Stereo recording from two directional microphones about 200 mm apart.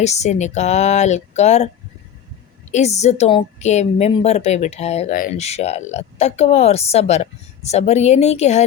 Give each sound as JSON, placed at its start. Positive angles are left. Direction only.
{"t": 0.0, "sound": "a woman's voice", "side_deg": 35}
{"t": 2.7, "sound": "a woman's voice", "side_deg": 35}